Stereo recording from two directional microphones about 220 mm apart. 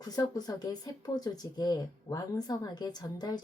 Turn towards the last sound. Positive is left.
turn(degrees=20)  # may be behind; listen again after turning